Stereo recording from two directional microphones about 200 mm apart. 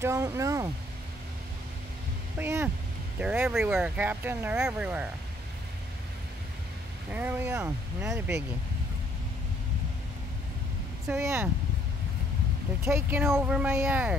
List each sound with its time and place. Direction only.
0.0 s speech: 15° right (ahead or behind)
2.3 s speech: 10° right (ahead or behind)
7.1 s speech: 10° right (ahead or behind)
11.1 s speech: 10° right (ahead or behind)
12.8 s speech: 10° right (ahead or behind)